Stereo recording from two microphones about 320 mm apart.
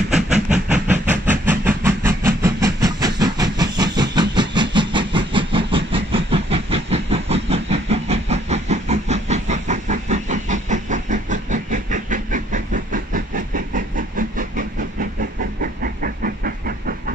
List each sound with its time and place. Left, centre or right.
0.1 s train: centre
5.9 s vehicle: centre